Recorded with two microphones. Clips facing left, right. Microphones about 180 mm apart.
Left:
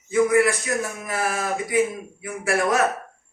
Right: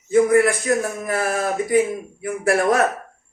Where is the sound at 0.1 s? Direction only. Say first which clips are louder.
Right 3 dB; 50° right (ahead or behind).